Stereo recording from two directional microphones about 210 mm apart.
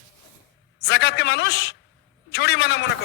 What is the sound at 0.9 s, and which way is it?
A man's voice, 55° left (ahead or behind).